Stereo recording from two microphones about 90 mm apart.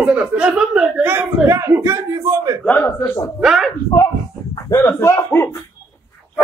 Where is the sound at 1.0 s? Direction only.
25° right (ahead or behind).